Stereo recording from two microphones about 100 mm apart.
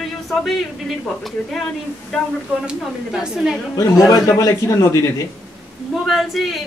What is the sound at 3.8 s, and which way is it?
A man's voice, 30° left (ahead or behind).